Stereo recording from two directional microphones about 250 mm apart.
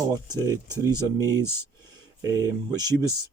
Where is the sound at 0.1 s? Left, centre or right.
Centre.